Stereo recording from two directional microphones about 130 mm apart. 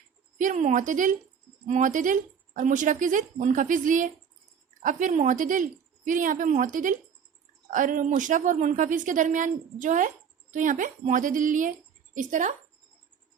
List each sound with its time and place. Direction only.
0.3 s a woman's voice: 70° right (ahead or behind); by 11.7 s 90° right
12.1 s a woman's voice: 75° right (ahead or behind)